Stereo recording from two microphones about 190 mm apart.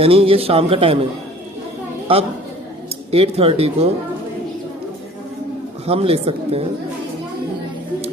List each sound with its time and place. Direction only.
0.0 s a man's voice: 30° right (ahead or behind)
2.1 s a woman's voice: 30° right (ahead or behind)
5.8 s a man's voice: 30° right (ahead or behind)